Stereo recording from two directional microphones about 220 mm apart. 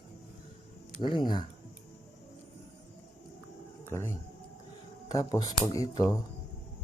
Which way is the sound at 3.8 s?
10° left (ahead or behind).